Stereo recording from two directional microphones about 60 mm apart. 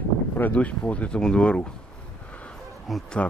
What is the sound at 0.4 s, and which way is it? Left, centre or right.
Speech, left.